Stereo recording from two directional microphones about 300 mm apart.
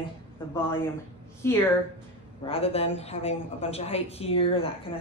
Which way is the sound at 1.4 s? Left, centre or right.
Centre.